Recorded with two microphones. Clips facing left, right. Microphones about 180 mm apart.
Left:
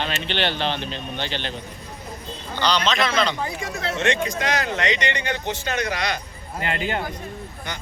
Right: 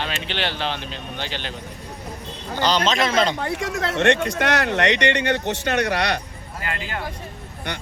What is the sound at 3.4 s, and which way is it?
Speech, 70° right (ahead or behind).